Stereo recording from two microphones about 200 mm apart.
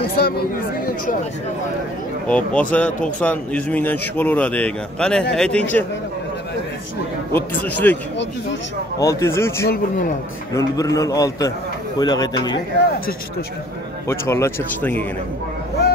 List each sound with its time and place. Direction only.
0.0 s speech: 50° left (ahead or behind)
2.2 s a man's voice: 5° left (ahead or behind)
7.3 s a man's voice: 10° left (ahead or behind)
9.0 s a man's voice: 15° left (ahead or behind)
9.7 s speech: 45° left (ahead or behind)
10.5 s a man's voice: 15° left (ahead or behind)
14.0 s a man's voice: 15° left (ahead or behind)